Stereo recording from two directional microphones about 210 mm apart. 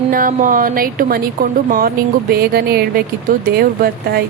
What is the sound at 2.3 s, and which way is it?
A woman's voice, 50° right (ahead or behind).